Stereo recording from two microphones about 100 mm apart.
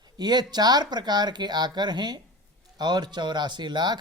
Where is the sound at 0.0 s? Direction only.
45° right (ahead or behind).